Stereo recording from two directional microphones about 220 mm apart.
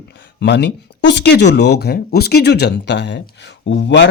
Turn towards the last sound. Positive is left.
turn(degrees=55)  # may be behind; listen again after turning